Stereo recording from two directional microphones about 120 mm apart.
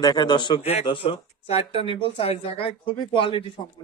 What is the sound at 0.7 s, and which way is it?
A man's voice, 55° left (ahead or behind).